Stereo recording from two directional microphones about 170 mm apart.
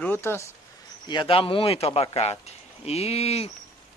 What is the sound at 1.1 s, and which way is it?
Speech, 30° left (ahead or behind).